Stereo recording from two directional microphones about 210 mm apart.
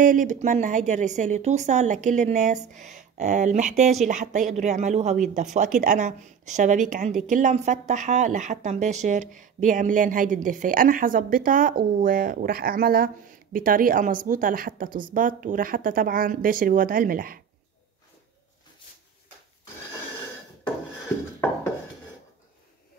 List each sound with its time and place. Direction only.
0.0 s speech: 40° right (ahead or behind)